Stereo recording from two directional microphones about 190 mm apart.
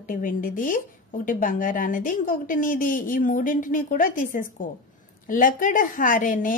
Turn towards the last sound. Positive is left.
turn(degrees=45)  # may be behind; listen again after turning